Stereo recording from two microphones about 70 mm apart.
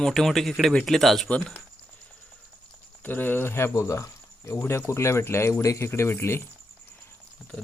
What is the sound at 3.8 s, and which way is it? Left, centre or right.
Speech, left.